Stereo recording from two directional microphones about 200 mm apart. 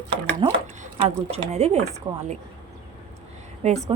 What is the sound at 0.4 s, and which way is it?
Speech, 25° right (ahead or behind).